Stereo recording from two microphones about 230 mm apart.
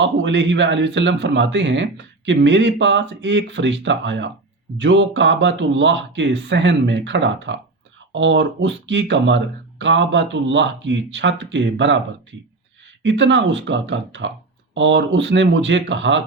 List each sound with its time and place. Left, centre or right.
0.0 s a man's voice: right
13.0 s a man's voice: right